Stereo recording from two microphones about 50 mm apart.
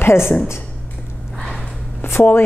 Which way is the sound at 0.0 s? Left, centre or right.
Left.